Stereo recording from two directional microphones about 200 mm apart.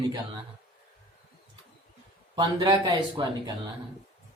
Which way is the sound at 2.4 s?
25° right (ahead or behind).